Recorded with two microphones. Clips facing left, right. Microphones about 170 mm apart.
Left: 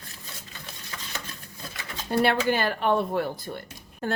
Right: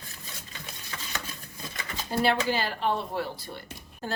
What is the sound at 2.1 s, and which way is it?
A woman's voice, 55° left (ahead or behind).